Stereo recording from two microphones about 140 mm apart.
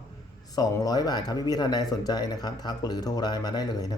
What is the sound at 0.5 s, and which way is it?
Speech, 25° left (ahead or behind).